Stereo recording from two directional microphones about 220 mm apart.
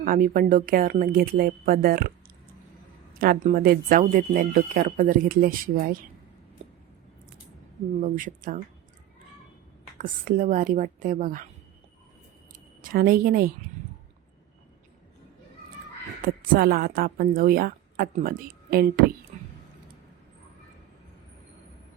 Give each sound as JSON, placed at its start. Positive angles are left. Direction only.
{"t": 0.0, "sound": "speech", "side_deg": -40}
{"t": 3.2, "sound": "speech", "side_deg": -40}
{"t": 6.6, "sound": "a sound", "side_deg": -30}
{"t": 8.0, "sound": "speech", "side_deg": -35}
{"t": 10.0, "sound": "speech", "side_deg": -40}
{"t": 12.5, "sound": "a woman's voice", "side_deg": -40}
{"t": 16.2, "sound": "a woman's voice", "side_deg": -40}
{"t": 19.3, "sound": "a sound", "side_deg": -35}